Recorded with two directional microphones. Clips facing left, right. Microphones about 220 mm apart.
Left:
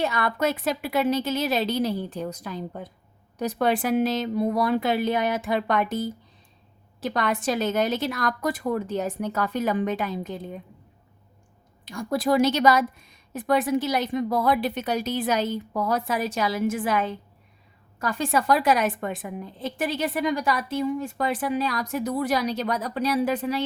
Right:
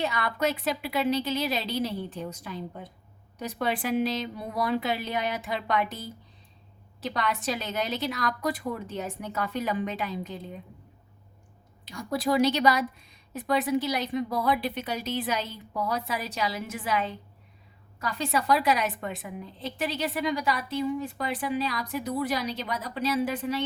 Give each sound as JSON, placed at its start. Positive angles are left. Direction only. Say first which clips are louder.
{"t": 0.0, "sound": "a woman's voice", "louder": "left 3 dB", "side_deg": 50}
{"t": 11.9, "sound": "a woman's voice", "louder": "left 4 dB", "side_deg": 50}